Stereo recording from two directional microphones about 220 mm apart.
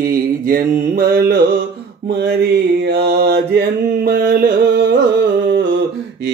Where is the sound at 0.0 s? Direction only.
40° right (ahead or behind).